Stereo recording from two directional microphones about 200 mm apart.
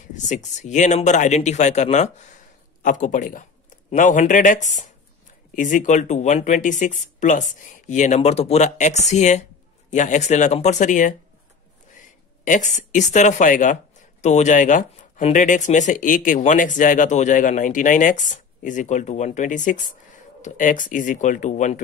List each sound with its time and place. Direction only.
0.1 s speech: 35° left (ahead or behind)